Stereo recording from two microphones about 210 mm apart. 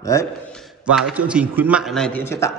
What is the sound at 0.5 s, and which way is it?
A man's voice, 5° right (ahead or behind).